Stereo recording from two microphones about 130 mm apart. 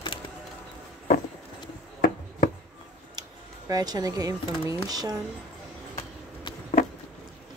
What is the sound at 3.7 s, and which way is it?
A woman's voice, 30° right (ahead or behind).